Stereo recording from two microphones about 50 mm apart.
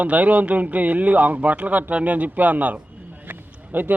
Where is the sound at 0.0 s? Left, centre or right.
Right.